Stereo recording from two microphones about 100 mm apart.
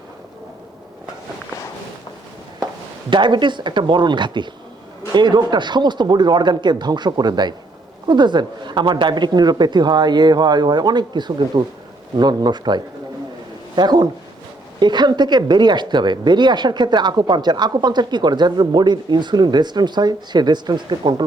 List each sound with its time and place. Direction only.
3.1 s speech: 50° right (ahead or behind)